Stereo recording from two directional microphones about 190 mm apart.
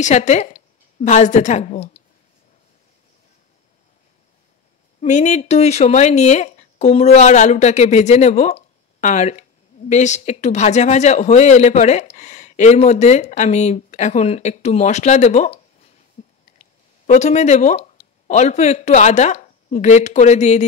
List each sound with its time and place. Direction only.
0.0 s a woman's voice: 40° left (ahead or behind)
5.0 s speech: 40° left (ahead or behind)
16.2 s a sound: 35° left (ahead or behind)
16.5 s speech: 40° left (ahead or behind)